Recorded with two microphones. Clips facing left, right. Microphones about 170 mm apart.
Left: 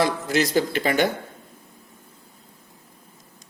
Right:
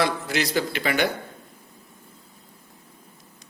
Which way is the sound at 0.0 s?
45° left (ahead or behind).